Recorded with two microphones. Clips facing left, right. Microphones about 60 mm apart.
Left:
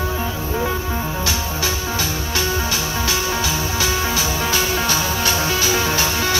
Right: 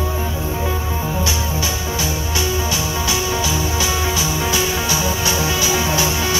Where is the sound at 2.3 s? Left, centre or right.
Left.